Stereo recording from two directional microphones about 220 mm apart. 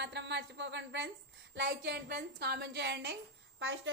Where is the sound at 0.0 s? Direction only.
50° right (ahead or behind).